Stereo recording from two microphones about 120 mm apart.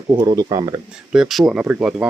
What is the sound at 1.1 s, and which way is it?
Speech, centre (ahead or behind).